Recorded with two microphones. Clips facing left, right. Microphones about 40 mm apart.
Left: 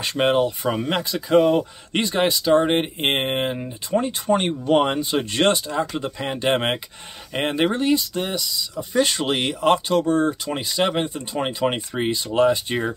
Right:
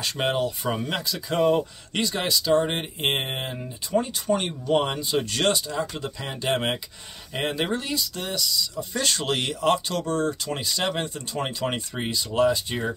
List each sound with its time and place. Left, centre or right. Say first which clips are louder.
0.0 s speech: left 6 dB; left